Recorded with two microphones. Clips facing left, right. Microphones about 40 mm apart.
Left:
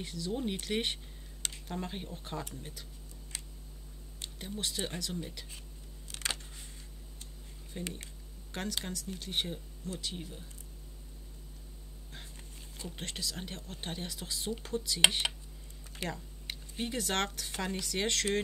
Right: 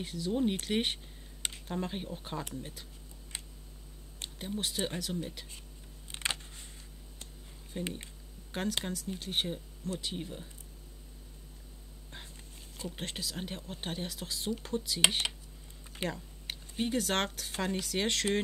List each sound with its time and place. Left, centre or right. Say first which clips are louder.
0.0 s speech: right 4 dB; centre
1.4 s computer keyboard: right 2 dB; right
1.8 s speech: right 4 dB; centre
3.3 s a sound: right 1 dB; right
4.5 s speech: right 3 dB; centre
6.0 s camera: right 2 dB; right
7.9 s a sound: right 3 dB; centre
8.8 s speech: right 3 dB; centre
12.5 s speech: right 3 dB; centre
15.8 s a sound: right 3 dB; right
16.1 s speech: right 1 dB; centre